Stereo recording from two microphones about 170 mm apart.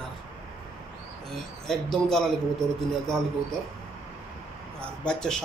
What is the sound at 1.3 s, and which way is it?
Speech, centre (ahead or behind).